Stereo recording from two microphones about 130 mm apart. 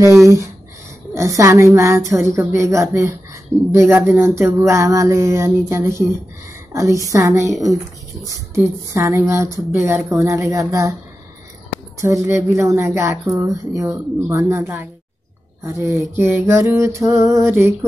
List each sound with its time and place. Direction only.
1.1 s speech: 25° right (ahead or behind)
8.5 s speech: 20° right (ahead or behind)
12.0 s speech: 25° right (ahead or behind)